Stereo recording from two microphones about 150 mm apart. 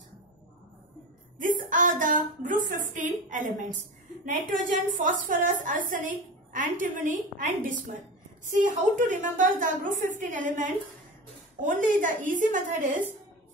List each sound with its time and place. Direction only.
1.4 s a woman's voice: 60° right (ahead or behind)